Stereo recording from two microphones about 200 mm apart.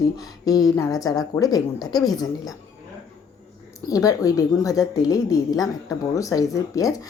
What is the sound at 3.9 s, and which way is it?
A woman's voice, 15° left (ahead or behind).